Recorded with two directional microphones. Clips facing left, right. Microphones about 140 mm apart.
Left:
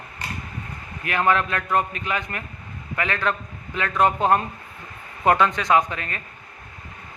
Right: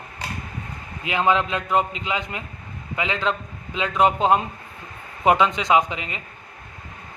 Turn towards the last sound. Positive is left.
turn(degrees=-15)  # may be behind; listen again after turning